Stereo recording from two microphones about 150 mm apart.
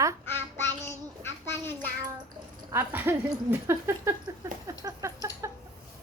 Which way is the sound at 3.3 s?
20° right (ahead or behind).